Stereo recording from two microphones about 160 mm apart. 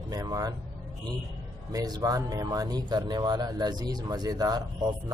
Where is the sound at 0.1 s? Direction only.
25° right (ahead or behind).